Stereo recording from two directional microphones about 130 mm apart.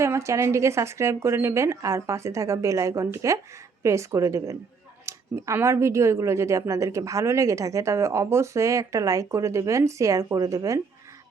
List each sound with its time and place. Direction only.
0.0 s speech: 20° right (ahead or behind)